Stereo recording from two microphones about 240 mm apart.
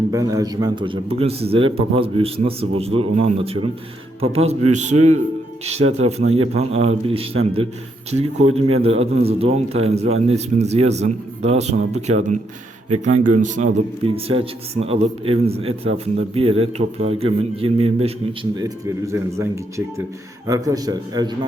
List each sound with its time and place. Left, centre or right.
0.1 s a man's voice: centre
18.6 s a man's voice: centre